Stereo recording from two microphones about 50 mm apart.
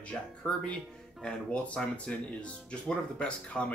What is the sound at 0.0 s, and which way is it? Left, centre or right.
Speech, left.